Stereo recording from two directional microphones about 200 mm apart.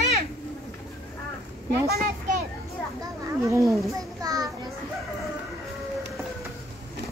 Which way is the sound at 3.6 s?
Centre (ahead or behind).